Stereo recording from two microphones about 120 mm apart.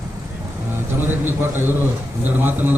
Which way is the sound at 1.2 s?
20° right (ahead or behind).